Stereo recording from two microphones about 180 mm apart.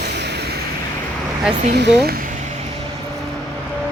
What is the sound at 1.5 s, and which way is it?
Speech, 45° right (ahead or behind).